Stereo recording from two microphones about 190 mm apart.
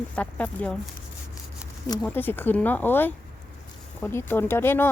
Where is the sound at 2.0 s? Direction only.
10° left (ahead or behind).